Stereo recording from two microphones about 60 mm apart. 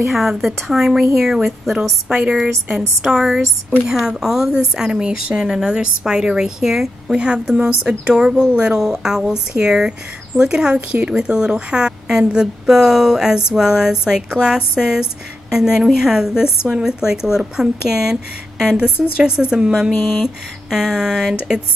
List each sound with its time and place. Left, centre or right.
0.0 s a woman's voice: centre
18.9 s speech: right
19.2 s a woman's voice: centre